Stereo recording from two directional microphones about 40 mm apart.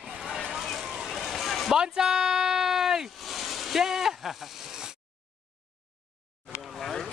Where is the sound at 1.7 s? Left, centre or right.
Centre.